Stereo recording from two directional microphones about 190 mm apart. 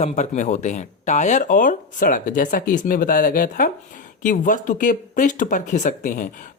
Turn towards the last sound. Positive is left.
turn(degrees=45)  # may be behind; listen again after turning